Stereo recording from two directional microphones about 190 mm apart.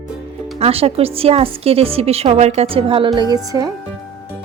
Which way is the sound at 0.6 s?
30° right (ahead or behind).